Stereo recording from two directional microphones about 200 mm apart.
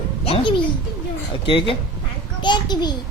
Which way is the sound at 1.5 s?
25° left (ahead or behind).